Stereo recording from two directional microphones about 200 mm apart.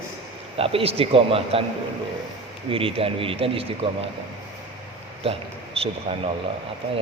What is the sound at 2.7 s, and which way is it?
Speech, 25° right (ahead or behind).